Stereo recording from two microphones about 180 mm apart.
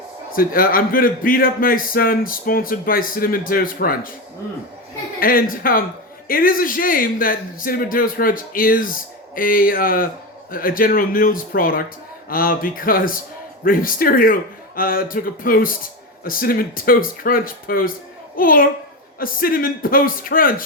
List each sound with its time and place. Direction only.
0.3 s a man's voice: 55° left (ahead or behind)
5.2 s a man's voice: 50° left (ahead or behind)